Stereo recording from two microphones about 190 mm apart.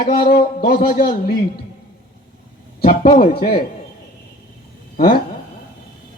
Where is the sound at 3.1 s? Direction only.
50° left (ahead or behind).